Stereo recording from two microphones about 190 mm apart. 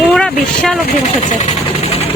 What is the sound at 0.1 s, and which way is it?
Vehicle, 5° left (ahead or behind).